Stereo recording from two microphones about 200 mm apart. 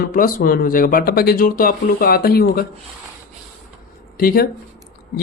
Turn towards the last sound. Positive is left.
turn(degrees=50)  # may be behind; listen again after turning